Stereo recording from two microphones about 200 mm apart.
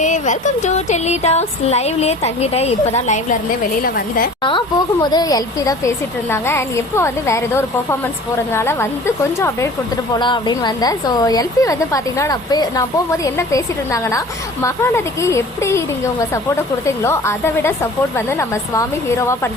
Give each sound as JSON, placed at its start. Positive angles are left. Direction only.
{"t": 0.0, "sound": "speech", "side_deg": 40}
{"t": 3.8, "sound": "a woman's voice", "side_deg": 45}
{"t": 5.1, "sound": "a woman's voice", "side_deg": 15}
{"t": 16.8, "sound": "speech", "side_deg": 15}